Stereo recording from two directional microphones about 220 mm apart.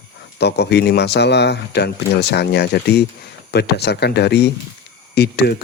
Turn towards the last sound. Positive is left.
turn(degrees=50)  # may be behind; listen again after turning